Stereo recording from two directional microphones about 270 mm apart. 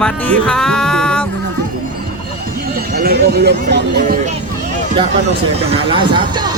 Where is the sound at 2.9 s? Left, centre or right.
Right.